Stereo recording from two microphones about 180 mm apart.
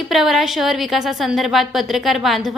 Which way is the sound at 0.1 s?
Centre (ahead or behind).